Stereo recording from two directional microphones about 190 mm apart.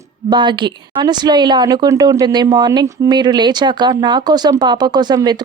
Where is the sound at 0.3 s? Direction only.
25° right (ahead or behind).